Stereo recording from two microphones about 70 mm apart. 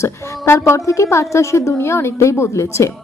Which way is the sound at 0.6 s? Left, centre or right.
Left.